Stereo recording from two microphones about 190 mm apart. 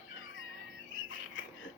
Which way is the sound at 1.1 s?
85° left.